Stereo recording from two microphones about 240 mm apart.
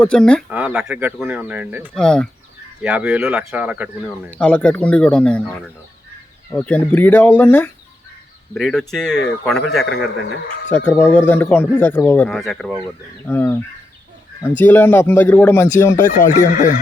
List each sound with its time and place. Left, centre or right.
0.0 s speech: centre
2.0 s speech: centre
4.3 s speech: centre
14.6 s speech: centre
16.6 s neigh: left